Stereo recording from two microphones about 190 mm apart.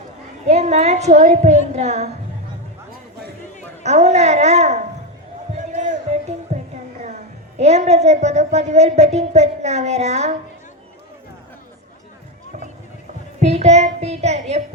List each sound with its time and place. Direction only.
0.4 s a woman's voice: 35° right (ahead or behind)
3.8 s a woman's voice: 35° right (ahead or behind)
5.5 s a sound: 40° right (ahead or behind)
6.5 s music: 35° right (ahead or behind)
7.6 s a woman's voice: 35° right (ahead or behind)
13.4 s child singing: 35° right (ahead or behind)